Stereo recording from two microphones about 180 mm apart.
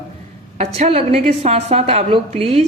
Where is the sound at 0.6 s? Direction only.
35° right (ahead or behind).